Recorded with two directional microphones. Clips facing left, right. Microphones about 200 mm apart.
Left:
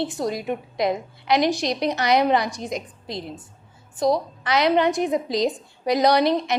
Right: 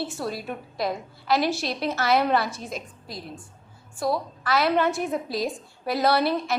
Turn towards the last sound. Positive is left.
turn(degrees=15)  # may be behind; listen again after turning